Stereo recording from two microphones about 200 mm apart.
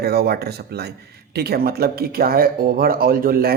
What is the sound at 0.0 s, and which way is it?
Speech, 50° right (ahead or behind).